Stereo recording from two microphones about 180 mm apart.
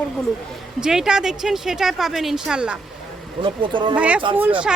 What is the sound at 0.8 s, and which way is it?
Speech, 5° right (ahead or behind).